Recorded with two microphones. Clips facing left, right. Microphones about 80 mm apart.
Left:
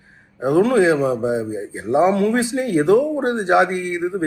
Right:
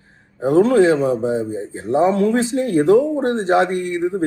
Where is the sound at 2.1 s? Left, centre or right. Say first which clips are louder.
Right 1 dB; left.